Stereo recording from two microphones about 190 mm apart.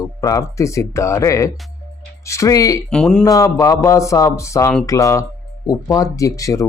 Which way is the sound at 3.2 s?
20° left (ahead or behind).